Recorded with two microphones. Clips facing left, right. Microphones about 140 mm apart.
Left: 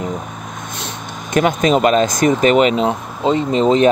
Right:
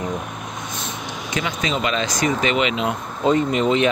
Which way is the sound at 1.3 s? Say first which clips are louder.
Left 11 dB; 45° left (ahead or behind).